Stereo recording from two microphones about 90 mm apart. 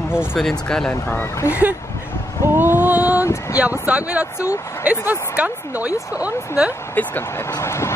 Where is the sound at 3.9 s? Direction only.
15° right (ahead or behind).